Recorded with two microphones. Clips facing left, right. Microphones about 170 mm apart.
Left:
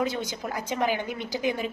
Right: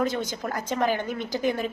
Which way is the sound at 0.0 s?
10° left (ahead or behind).